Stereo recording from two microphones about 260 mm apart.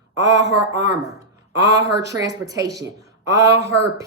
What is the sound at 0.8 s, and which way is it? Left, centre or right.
Speech, centre.